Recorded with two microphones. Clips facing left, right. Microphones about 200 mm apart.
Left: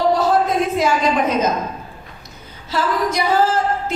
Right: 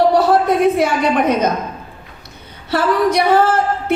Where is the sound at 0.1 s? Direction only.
65° right (ahead or behind).